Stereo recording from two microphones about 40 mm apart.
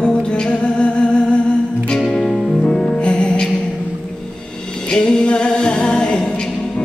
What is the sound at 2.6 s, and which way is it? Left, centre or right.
Music, left.